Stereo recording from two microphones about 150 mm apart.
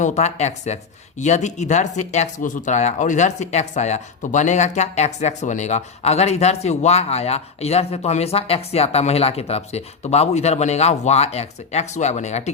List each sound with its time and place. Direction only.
0.0 s speech: 50° left (ahead or behind)